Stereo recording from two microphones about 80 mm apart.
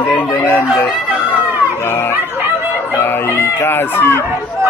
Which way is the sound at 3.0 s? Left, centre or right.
Left.